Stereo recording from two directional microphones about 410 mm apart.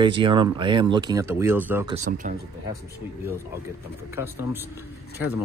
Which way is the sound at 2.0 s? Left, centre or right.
Centre.